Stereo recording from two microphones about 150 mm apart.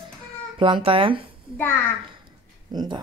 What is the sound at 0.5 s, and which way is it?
Speech, 35° right (ahead or behind).